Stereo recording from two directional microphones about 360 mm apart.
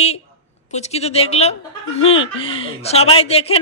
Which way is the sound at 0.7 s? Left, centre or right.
Centre.